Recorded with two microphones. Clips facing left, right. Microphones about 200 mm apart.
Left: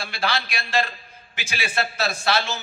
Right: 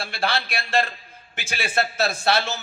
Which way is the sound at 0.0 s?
60° right (ahead or behind).